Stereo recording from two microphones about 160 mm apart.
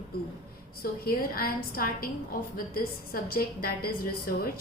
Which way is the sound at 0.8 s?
65° left (ahead or behind).